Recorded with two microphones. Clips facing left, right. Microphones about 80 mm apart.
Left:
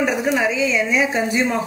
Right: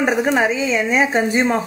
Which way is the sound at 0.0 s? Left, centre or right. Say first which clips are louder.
Right 2 dB; right.